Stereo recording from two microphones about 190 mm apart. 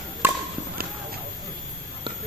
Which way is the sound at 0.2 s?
10° right (ahead or behind).